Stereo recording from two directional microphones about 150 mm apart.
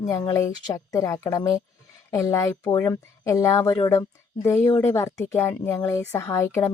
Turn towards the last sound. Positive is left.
turn(degrees=20)  # may be behind; listen again after turning